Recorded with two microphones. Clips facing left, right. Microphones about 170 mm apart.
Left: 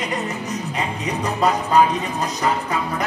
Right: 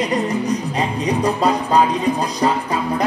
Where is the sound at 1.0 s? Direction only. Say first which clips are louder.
Right 3 dB; 35° right (ahead or behind).